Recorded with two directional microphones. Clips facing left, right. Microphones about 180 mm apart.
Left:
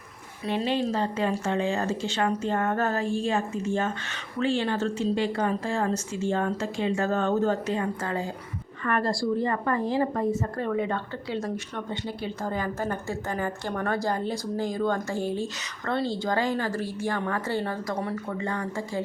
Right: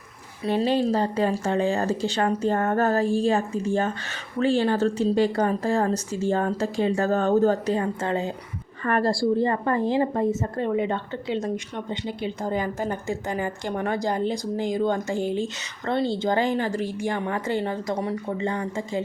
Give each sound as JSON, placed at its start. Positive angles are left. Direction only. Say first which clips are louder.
{"t": 0.4, "sound": "speech", "louder": "right 4 dB", "side_deg": -35}
{"t": 8.0, "sound": "a woman's voice", "louder": "right 4 dB", "side_deg": -25}
{"t": 8.8, "sound": "a woman's voice", "louder": "right 4 dB", "side_deg": -35}